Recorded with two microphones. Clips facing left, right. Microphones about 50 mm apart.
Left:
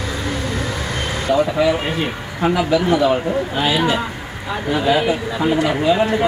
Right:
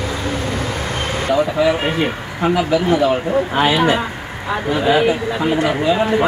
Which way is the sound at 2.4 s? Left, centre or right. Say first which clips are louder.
Even; centre.